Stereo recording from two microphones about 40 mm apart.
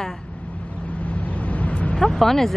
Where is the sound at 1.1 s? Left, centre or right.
Left.